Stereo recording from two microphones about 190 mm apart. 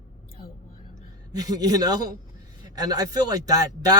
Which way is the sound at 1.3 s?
20° right (ahead or behind).